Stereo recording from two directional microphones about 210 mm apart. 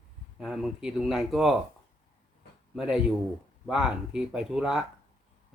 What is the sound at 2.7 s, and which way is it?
Speech, 5° right (ahead or behind).